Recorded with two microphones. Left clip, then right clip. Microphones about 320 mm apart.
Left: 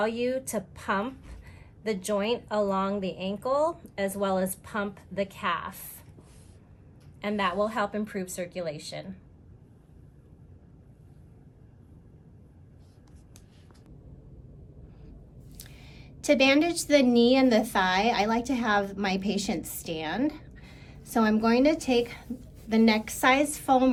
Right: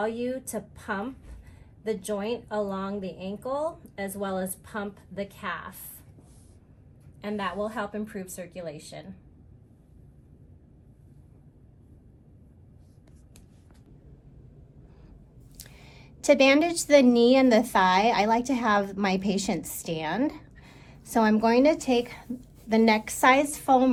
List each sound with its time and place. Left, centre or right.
0.0 s a woman's voice: centre
7.2 s a woman's voice: centre
15.5 s a woman's voice: centre